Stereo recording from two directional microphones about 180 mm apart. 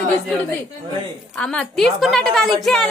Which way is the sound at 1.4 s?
5° left (ahead or behind).